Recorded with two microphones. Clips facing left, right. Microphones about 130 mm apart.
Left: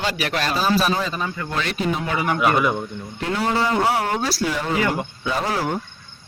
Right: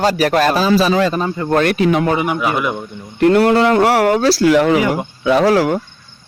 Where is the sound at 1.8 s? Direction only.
80° right.